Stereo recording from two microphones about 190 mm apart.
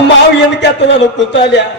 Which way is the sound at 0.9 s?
65° left (ahead or behind).